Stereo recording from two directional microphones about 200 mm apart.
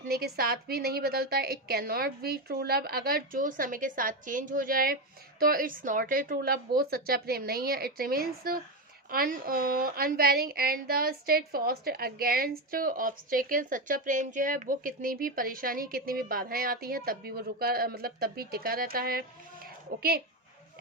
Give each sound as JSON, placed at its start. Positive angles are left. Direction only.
{"t": 0.1, "sound": "a woman's voice", "side_deg": -50}